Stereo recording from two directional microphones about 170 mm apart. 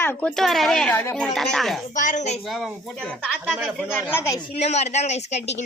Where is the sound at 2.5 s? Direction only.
Centre (ahead or behind).